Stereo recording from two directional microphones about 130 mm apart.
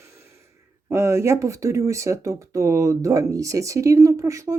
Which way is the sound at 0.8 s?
20° right (ahead or behind).